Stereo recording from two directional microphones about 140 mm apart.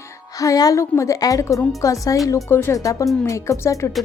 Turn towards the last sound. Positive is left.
turn(degrees=20)  # may be behind; listen again after turning